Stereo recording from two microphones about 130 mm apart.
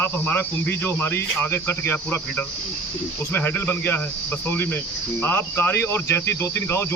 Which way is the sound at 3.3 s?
15° left (ahead or behind).